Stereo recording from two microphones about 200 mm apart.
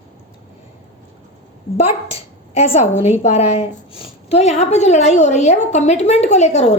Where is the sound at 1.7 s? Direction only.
30° left (ahead or behind).